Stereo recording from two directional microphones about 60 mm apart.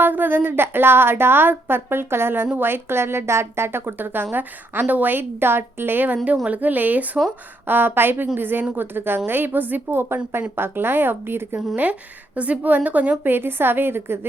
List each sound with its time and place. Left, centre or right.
0.0 s speech: right
12.4 s speech: right